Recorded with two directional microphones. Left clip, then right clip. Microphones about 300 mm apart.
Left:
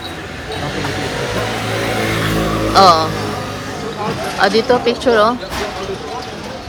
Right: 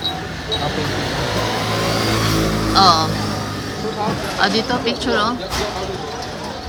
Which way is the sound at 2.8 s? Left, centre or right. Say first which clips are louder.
Left 4 dB; centre.